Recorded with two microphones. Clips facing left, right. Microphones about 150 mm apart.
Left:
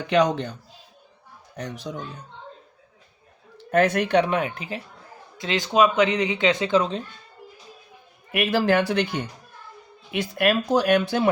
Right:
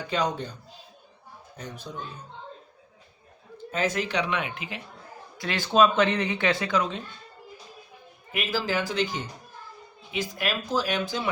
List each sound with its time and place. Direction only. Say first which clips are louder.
0.1 s speech: left 8 dB; 70° left (ahead or behind)
1.5 s speech: left 7 dB; 75° left (ahead or behind)
3.7 s speech: left 8 dB; 60° left (ahead or behind); by 4.8 s 40° left (ahead or behind)
5.4 s speech: left 1 dB; 20° left (ahead or behind)
8.3 s speech: left 8 dB; 60° left (ahead or behind)